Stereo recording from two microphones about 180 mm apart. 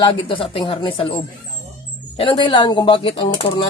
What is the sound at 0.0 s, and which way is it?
Speech, 30° left (ahead or behind).